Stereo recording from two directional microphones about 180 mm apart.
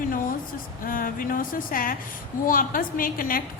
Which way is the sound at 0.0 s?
50° left (ahead or behind).